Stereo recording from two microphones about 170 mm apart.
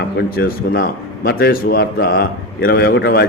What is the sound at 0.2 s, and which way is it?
A man's voice, 60° left (ahead or behind).